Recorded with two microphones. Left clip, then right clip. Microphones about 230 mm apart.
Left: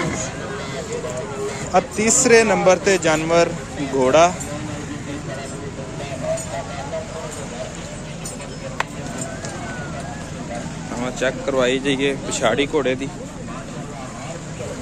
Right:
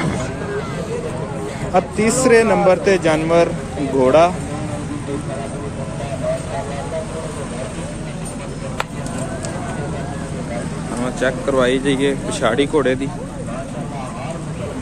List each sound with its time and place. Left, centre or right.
1.7 s speech: centre
11.1 s speech: centre